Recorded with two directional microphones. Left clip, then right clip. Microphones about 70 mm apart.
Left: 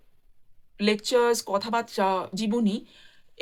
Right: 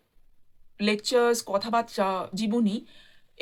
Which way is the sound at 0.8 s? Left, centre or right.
Centre.